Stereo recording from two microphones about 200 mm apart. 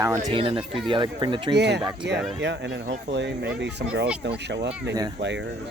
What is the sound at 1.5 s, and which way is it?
Speech, 55° right (ahead or behind).